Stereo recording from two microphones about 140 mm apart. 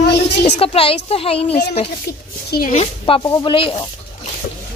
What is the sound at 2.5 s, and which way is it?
Speech, 80° left.